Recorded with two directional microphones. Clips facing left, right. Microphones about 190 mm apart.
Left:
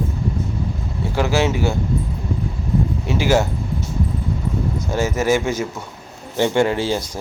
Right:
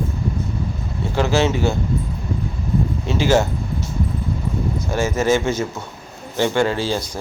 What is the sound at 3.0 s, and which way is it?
Speech, 15° left (ahead or behind).